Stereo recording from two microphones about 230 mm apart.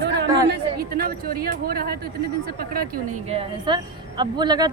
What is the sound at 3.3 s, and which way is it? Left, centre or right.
A woman's voice, right.